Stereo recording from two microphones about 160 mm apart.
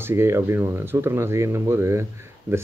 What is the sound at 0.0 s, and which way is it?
Speech, 15° right (ahead or behind).